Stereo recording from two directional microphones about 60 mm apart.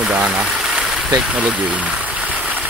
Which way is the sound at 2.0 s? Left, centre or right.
Right.